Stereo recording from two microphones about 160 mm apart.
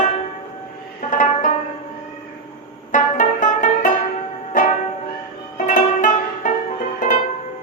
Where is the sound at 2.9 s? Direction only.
55° left (ahead or behind).